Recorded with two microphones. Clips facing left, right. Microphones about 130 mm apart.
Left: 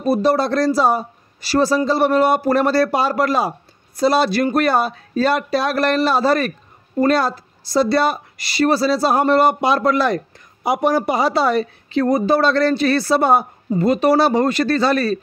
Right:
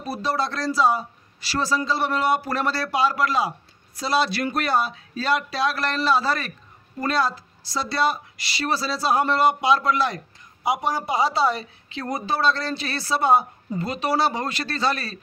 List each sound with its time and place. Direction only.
0.0 s speech: 55° left (ahead or behind)